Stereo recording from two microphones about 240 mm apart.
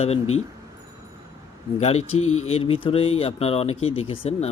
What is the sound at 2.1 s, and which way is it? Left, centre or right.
Speech, left.